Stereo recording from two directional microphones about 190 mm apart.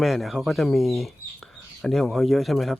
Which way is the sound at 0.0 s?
Centre (ahead or behind).